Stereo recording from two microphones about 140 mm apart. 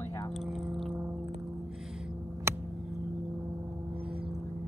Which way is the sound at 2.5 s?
20° right (ahead or behind).